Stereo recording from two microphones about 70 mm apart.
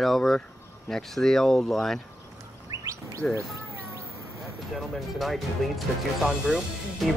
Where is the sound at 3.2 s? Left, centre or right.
Centre.